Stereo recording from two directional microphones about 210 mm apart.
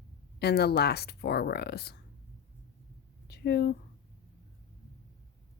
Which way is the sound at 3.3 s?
50° left (ahead or behind).